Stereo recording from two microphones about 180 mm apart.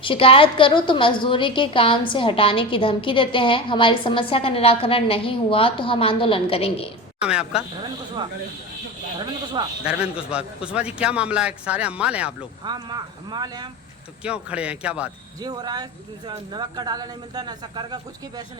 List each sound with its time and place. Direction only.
0.0 s a woman's voice: 30° left (ahead or behind)
7.2 s a woman's voice: 5° right (ahead or behind)
9.8 s a man's voice: 5° right (ahead or behind)
12.6 s speech: 25° right (ahead or behind)
14.3 s a man's voice: 5° right (ahead or behind)
15.4 s speech: 20° right (ahead or behind)